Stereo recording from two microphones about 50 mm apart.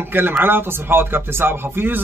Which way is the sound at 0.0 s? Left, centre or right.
Right.